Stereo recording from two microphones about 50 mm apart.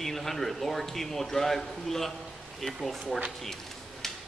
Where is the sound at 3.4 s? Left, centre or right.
Centre.